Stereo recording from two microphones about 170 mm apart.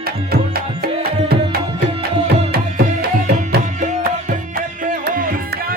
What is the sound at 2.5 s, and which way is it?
Music, 65° right (ahead or behind).